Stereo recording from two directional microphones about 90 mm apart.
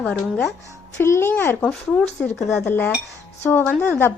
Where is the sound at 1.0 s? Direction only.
30° left (ahead or behind).